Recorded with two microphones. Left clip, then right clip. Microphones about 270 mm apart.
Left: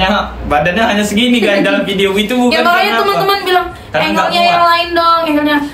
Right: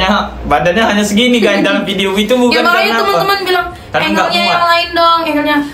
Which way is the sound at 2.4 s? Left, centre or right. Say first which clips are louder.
Left 2 dB; centre.